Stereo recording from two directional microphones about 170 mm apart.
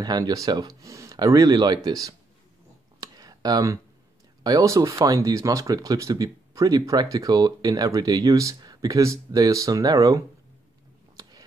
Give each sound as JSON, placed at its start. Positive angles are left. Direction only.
{"t": 0.0, "sound": "speech", "side_deg": -20}
{"t": 3.0, "sound": "a sound", "side_deg": -25}
{"t": 4.4, "sound": "speech", "side_deg": -20}